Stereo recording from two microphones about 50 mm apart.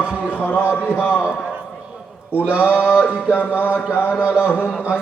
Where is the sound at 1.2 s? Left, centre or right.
Right.